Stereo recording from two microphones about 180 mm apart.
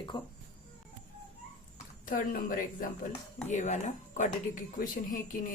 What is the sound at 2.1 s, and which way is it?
Speech, 50° left (ahead or behind).